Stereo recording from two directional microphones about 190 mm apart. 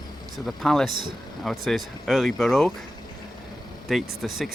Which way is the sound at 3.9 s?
Centre (ahead or behind).